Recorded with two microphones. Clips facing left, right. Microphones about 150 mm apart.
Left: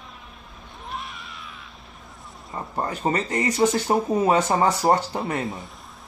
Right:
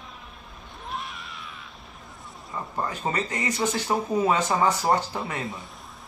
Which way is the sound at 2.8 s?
35° left (ahead or behind).